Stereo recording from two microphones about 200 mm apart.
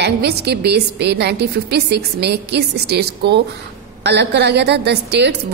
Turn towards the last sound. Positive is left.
turn(degrees=-55)  # may be behind; listen again after turning